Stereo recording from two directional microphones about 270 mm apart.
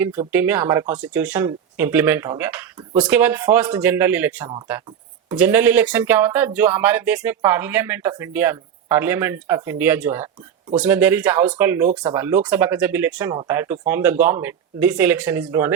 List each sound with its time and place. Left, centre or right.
0.3 s speech: centre